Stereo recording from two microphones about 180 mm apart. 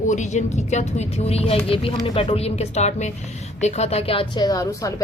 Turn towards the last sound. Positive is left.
turn(degrees=20)  # may be behind; listen again after turning